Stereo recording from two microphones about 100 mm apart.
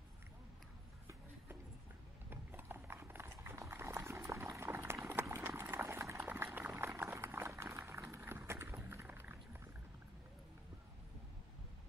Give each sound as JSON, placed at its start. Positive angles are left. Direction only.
{"t": 2.2, "sound": "clip-clop", "side_deg": -20}